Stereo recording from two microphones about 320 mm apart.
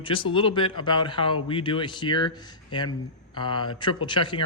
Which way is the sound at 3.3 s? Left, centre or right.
Centre.